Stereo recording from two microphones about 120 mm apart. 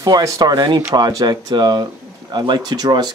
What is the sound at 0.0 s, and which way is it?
Speech, 30° right (ahead or behind).